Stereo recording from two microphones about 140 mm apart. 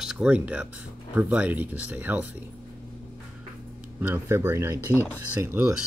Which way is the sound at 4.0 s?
15° right (ahead or behind).